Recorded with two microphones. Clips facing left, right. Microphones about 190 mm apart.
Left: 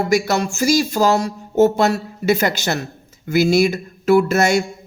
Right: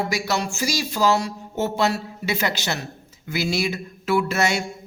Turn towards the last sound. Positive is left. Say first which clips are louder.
# left 7 dB
turn(degrees=45)  # may be behind; listen again after turning